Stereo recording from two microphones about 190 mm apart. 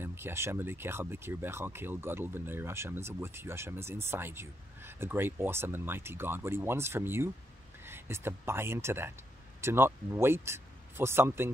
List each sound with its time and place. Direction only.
0.0 s speech: 10° right (ahead or behind)